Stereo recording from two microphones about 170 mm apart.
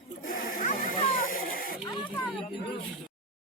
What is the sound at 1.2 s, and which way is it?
Snake, 55° left (ahead or behind).